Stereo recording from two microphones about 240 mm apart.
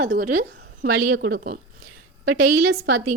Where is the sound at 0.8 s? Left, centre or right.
Right.